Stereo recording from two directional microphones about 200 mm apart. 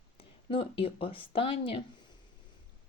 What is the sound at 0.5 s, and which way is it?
Speech, 25° left (ahead or behind).